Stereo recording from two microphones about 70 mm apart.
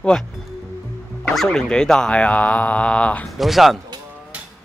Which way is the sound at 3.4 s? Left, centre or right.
Centre.